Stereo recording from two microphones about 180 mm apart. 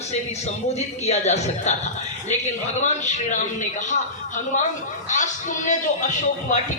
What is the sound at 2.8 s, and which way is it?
Speech, 40° left (ahead or behind).